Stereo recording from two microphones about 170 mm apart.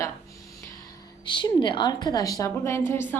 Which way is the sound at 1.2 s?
30° left (ahead or behind).